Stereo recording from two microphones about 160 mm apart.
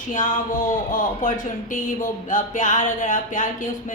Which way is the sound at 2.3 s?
50° left (ahead or behind).